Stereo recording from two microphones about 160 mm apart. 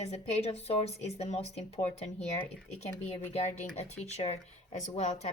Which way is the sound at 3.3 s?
45° left (ahead or behind).